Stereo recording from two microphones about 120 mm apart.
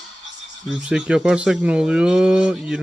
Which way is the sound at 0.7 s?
5° right (ahead or behind).